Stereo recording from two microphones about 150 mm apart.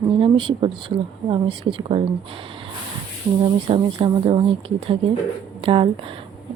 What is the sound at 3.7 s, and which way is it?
Speech, 35° right (ahead or behind).